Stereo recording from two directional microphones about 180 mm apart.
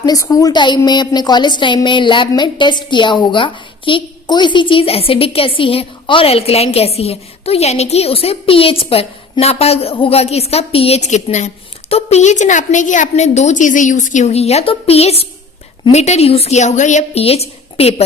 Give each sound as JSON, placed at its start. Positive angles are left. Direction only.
{"t": 0.0, "sound": "a woman's voice", "side_deg": 20}